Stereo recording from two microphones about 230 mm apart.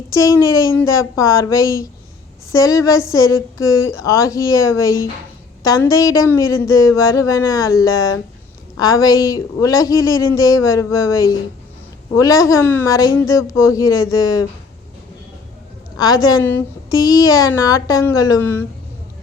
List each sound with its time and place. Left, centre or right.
0.1 s a woman's voice: centre
16.0 s a woman's voice: centre